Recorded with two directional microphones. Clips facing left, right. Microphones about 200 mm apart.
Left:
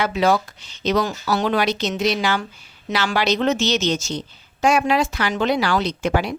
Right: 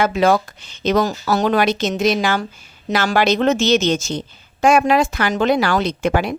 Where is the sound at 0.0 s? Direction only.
50° right (ahead or behind).